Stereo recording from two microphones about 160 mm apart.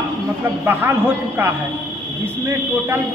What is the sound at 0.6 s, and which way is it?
Speech, 15° right (ahead or behind).